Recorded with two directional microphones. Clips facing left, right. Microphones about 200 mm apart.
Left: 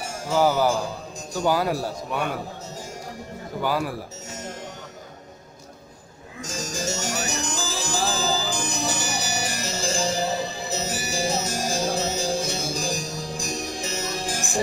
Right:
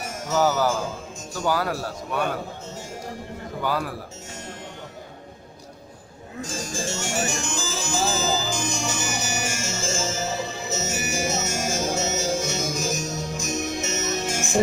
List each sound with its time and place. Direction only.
0.0 s music: 30° left (ahead or behind)
0.4 s a man's voice: 15° left (ahead or behind)
3.6 s a man's voice: 10° left (ahead or behind)
6.4 s music: 40° left (ahead or behind)